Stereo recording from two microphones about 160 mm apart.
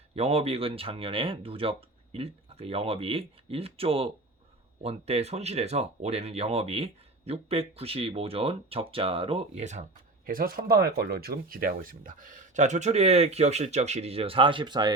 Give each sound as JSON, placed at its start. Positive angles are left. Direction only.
{"t": 0.2, "sound": "speech", "side_deg": -40}
{"t": 10.2, "sound": "speech", "side_deg": -60}